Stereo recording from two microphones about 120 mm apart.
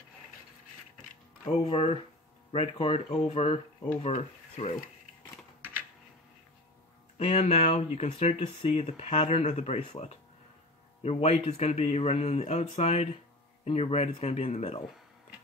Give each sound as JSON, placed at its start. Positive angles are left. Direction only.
{"t": 1.5, "sound": "speech", "side_deg": 50}
{"t": 5.6, "sound": "typing", "side_deg": -15}
{"t": 7.2, "sound": "speech", "side_deg": 60}